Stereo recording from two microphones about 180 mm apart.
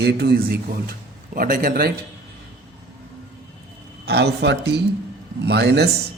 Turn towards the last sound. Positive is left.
turn(degrees=-65)  # may be behind; listen again after turning